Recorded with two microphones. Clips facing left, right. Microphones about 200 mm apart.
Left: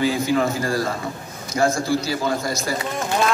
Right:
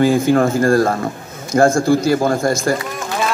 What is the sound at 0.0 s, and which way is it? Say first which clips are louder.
Speech: right 7 dB; 50° right (ahead or behind).